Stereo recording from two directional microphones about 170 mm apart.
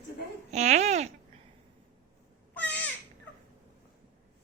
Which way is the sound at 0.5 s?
40° right (ahead or behind).